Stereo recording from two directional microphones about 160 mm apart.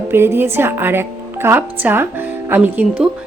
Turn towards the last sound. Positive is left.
turn(degrees=-10)  # may be behind; listen again after turning